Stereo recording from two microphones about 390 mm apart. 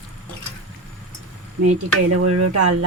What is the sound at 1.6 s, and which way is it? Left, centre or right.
Stir, right.